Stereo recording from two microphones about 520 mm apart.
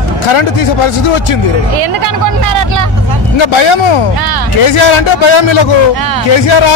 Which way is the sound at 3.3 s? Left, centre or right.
Left.